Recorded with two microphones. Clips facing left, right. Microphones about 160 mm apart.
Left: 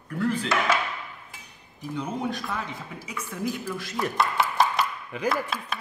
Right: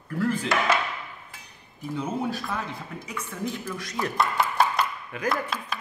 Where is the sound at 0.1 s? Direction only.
5° right (ahead or behind).